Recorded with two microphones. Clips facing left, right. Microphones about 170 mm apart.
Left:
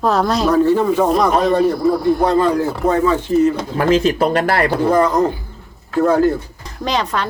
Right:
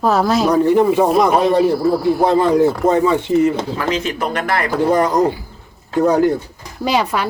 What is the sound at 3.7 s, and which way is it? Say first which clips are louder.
Speech: left 6 dB; 35° left (ahead or behind).